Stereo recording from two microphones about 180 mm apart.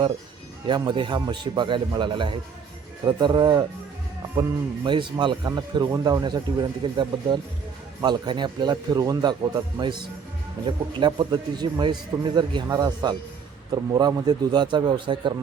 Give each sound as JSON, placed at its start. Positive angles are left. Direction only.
{"t": 0.7, "sound": "a man's voice", "side_deg": -25}